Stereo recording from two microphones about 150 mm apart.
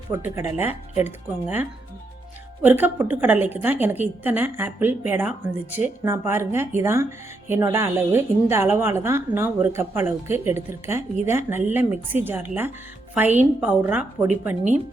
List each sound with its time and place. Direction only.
0.1 s a woman's voice: 15° right (ahead or behind)